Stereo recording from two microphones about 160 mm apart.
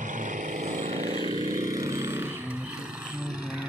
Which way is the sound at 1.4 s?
20° right (ahead or behind).